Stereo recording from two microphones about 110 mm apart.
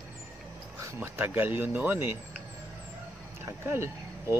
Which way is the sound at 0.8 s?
25° right (ahead or behind).